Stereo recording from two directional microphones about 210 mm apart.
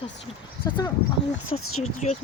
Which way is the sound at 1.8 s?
30° left (ahead or behind).